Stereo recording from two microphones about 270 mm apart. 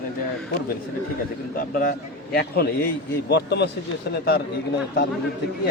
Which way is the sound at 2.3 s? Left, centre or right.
Left.